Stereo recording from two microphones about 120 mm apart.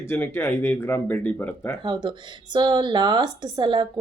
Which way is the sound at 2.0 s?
40° right (ahead or behind).